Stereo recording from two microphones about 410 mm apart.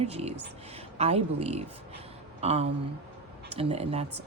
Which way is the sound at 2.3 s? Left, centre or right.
Centre.